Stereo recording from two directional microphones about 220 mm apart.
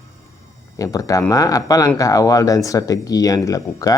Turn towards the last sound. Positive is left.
turn(degrees=15)  # may be behind; listen again after turning